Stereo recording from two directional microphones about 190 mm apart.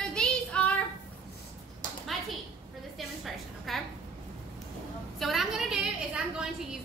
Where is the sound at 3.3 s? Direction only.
Centre (ahead or behind).